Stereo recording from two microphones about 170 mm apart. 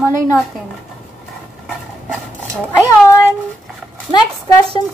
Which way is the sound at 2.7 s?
15° left (ahead or behind).